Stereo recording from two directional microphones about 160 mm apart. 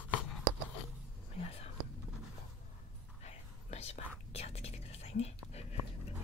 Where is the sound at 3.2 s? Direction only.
40° left (ahead or behind).